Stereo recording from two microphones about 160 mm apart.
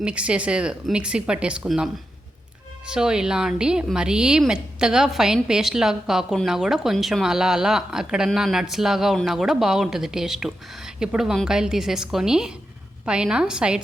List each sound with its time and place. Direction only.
0.0 s a woman's voice: 5° right (ahead or behind)